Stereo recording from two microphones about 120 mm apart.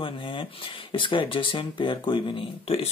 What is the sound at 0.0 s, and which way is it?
Speech, 45° left (ahead or behind).